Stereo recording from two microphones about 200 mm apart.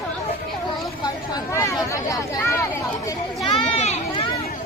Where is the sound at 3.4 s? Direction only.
30° left (ahead or behind).